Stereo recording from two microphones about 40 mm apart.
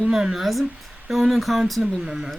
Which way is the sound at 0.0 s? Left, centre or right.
Centre.